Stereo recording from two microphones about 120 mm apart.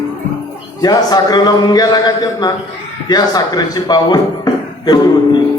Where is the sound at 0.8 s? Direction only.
35° left (ahead or behind).